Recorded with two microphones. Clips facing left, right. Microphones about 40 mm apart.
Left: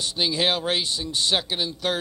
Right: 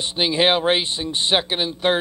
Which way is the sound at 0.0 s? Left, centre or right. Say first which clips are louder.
Right 5 dB; right.